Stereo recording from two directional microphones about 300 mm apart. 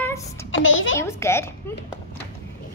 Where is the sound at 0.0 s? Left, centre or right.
Centre.